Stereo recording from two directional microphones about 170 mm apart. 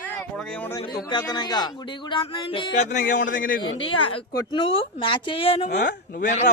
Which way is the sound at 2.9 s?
50° left (ahead or behind).